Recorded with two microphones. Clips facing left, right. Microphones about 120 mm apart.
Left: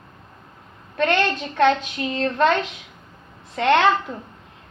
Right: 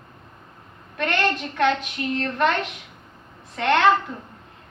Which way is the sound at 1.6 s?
35° left (ahead or behind).